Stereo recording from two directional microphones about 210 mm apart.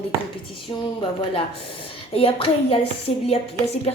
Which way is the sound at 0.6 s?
25° left (ahead or behind).